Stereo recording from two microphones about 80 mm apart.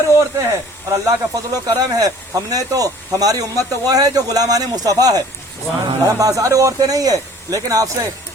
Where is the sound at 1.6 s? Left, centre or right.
Right.